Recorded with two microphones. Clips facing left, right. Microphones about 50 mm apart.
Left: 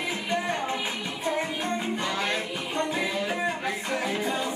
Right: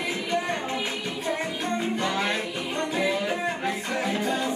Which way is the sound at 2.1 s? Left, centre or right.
Centre.